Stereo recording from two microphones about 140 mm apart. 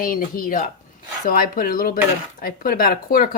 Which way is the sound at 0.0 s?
85° left.